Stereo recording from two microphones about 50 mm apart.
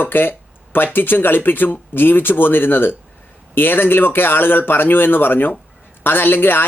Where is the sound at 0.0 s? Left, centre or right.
Left.